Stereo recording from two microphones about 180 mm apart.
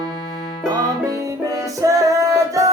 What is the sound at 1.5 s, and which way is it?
Music, 20° right (ahead or behind).